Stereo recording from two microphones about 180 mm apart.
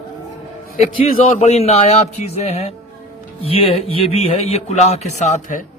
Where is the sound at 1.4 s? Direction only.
35° left (ahead or behind).